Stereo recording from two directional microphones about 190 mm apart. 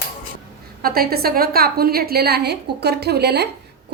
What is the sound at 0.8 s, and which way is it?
A woman's voice, 50° right (ahead or behind).